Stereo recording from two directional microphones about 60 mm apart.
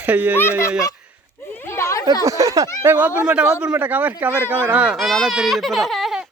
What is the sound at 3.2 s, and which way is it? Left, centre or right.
Speech, centre.